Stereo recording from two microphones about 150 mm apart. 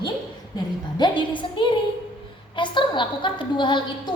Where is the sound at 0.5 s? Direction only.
30° left (ahead or behind).